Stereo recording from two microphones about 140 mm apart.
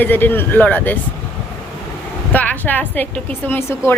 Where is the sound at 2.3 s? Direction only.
15° left (ahead or behind).